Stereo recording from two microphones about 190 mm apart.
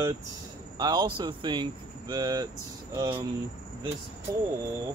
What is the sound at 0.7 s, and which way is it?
Speech, 20° right (ahead or behind).